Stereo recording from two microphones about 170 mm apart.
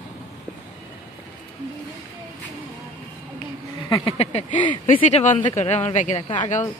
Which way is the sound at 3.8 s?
25° left (ahead or behind).